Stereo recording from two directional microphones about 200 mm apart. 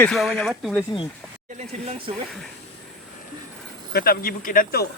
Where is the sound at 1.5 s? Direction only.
30° right (ahead or behind).